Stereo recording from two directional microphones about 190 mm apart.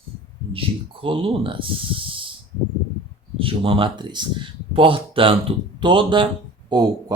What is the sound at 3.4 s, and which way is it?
Speech, 30° right (ahead or behind).